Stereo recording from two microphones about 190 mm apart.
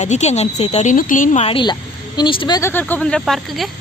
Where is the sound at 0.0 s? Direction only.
40° left (ahead or behind).